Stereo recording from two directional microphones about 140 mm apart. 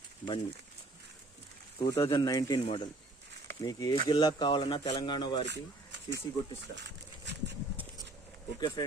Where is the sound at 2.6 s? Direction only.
40° left (ahead or behind).